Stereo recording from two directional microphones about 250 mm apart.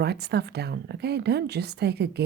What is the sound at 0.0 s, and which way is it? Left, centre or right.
Speech, right.